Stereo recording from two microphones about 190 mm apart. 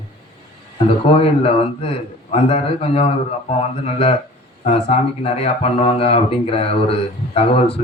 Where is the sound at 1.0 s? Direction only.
30° left (ahead or behind).